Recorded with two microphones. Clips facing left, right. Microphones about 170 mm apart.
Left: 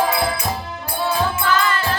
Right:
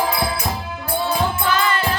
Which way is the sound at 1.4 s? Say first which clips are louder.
Even; 20° right (ahead or behind).